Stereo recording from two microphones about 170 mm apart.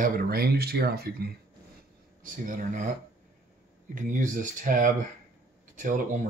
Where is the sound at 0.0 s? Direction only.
60° right (ahead or behind).